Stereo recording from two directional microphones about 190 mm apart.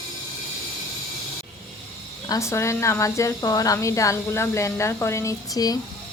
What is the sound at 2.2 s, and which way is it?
A woman's voice, 15° left (ahead or behind).